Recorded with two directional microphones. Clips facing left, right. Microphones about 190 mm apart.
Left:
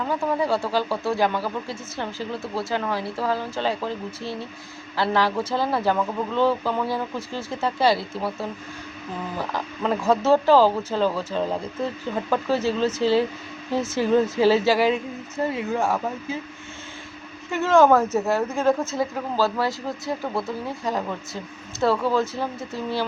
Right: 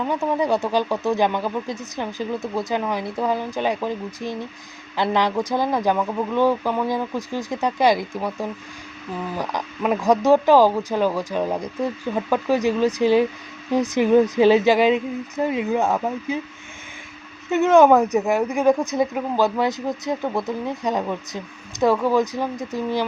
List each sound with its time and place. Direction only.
0.1 s speech: 20° right (ahead or behind)
17.5 s speech: 20° right (ahead or behind)